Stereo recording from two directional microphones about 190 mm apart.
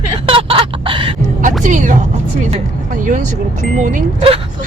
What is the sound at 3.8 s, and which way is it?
Speech, 45° right (ahead or behind).